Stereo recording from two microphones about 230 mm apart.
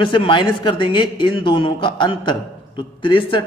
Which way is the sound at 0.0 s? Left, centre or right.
Left.